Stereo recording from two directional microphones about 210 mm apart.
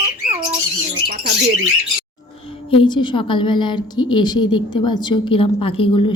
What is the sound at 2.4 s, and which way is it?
A woman's voice, 25° left (ahead or behind).